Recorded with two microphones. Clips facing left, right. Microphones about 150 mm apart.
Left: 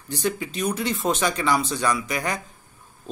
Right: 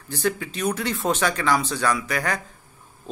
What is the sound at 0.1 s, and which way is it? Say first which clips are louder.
Speech: right 1 dB; 10° left (ahead or behind).